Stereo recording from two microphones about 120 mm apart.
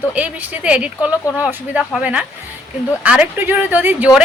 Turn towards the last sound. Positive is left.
turn(degrees=-15)  # may be behind; listen again after turning